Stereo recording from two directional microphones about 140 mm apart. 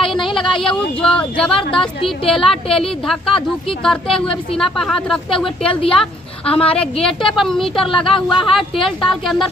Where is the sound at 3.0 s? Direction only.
Centre (ahead or behind).